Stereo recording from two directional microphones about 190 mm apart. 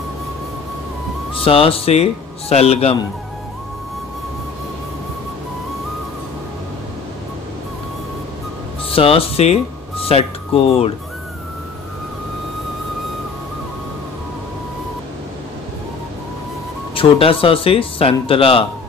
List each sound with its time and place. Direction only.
1.3 s speech: 30° left (ahead or behind)
8.9 s speech: 30° left (ahead or behind)
16.9 s speech: 30° left (ahead or behind)